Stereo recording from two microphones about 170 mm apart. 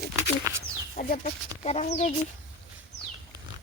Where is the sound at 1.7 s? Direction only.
40° left (ahead or behind).